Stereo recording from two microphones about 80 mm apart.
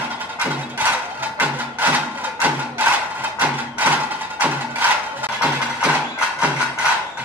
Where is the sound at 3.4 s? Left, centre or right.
Right.